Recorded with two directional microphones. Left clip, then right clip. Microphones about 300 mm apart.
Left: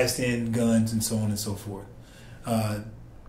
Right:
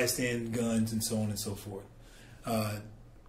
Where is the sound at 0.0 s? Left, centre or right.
Right.